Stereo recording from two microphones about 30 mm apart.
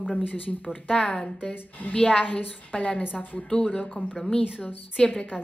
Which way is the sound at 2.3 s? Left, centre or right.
Left.